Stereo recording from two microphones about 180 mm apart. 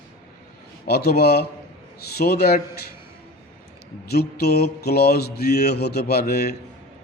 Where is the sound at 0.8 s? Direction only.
60° left (ahead or behind).